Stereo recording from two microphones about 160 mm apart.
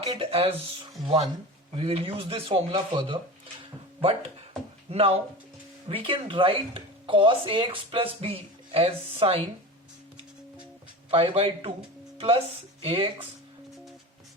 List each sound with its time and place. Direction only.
0.0 s speech: 30° right (ahead or behind)
1.7 s speech: 35° right (ahead or behind)
4.9 s speech: 40° right (ahead or behind)
11.1 s speech: 35° right (ahead or behind)
12.1 s music: 35° right (ahead or behind)
12.8 s speech: 35° right (ahead or behind)